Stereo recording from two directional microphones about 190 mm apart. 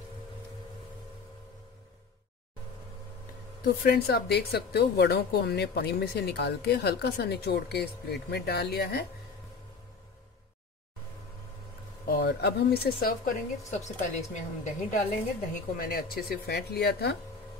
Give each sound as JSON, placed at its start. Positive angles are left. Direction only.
{"t": 3.8, "sound": "speech", "side_deg": 60}
{"t": 12.1, "sound": "speech", "side_deg": 60}